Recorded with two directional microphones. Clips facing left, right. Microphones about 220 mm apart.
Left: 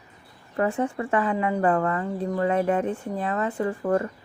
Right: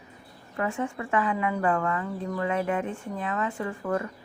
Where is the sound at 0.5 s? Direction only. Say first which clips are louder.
Left 5 dB; 35° left (ahead or behind).